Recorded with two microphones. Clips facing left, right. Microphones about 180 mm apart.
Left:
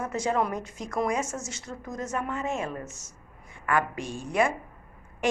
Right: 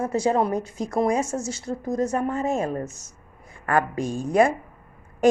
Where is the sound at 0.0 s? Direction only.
30° right (ahead or behind).